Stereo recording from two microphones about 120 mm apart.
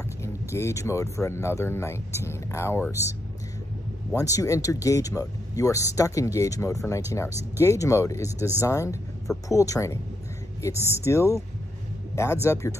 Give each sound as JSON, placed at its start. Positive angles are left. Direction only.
{"t": 0.2, "sound": "speech", "side_deg": 25}